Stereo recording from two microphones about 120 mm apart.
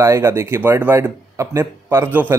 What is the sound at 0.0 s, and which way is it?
Speech, 25° right (ahead or behind).